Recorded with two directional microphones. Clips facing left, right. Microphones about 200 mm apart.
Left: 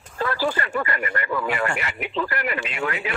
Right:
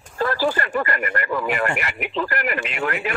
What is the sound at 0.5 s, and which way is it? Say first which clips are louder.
Speech: right 2 dB; 45° right (ahead or behind).